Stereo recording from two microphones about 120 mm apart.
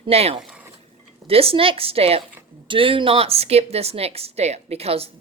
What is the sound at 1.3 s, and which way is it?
Speech, 55° right (ahead or behind).